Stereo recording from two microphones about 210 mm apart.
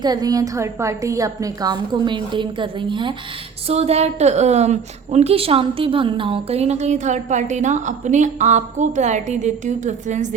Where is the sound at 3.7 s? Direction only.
30° right (ahead or behind).